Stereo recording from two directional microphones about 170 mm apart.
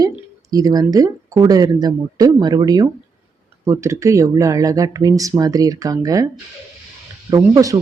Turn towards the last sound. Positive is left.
turn(degrees=-20)  # may be behind; listen again after turning